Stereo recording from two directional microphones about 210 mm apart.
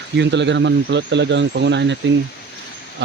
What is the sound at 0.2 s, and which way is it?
Speech, 55° right (ahead or behind).